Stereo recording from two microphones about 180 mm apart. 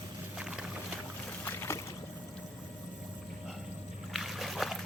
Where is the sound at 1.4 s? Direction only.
15° left (ahead or behind).